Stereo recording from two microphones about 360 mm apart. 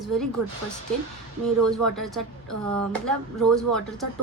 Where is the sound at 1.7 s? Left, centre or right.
Centre.